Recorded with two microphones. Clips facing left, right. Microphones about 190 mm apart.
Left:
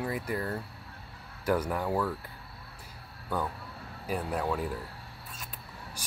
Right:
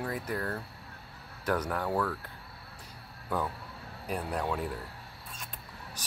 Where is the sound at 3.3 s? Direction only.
Centre (ahead or behind).